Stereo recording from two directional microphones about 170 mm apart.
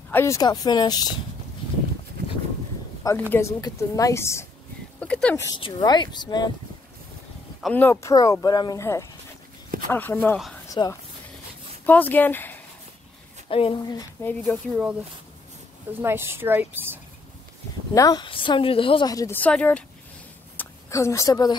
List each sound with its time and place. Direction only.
0.1 s a woman's voice: 15° left (ahead or behind)
3.0 s a woman's voice: 15° left (ahead or behind)
5.6 s a woman's voice: 25° left (ahead or behind)
7.6 s a woman's voice: 10° left (ahead or behind)
11.8 s speech: 10° left (ahead or behind)
13.5 s speech: 35° left (ahead or behind)
14.2 s speech: 5° left (ahead or behind)
16.0 s speech: 15° right (ahead or behind)
17.9 s a woman's voice: 25° left (ahead or behind)